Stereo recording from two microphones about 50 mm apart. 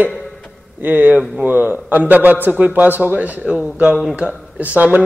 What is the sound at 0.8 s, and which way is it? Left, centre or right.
A man's voice, right.